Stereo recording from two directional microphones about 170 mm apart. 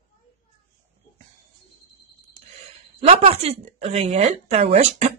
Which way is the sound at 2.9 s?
40° right (ahead or behind).